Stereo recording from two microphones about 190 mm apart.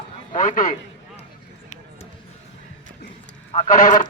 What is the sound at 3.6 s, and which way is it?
Speech, 40° left (ahead or behind).